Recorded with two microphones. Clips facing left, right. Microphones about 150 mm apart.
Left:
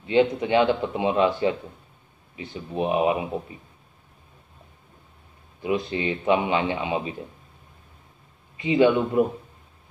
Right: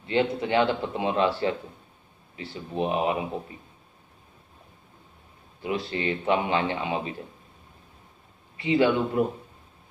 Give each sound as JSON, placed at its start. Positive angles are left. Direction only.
{"t": 0.0, "sound": "a man's voice", "side_deg": 15}
{"t": 5.6, "sound": "speech", "side_deg": 20}
{"t": 8.6, "sound": "a man's voice", "side_deg": 20}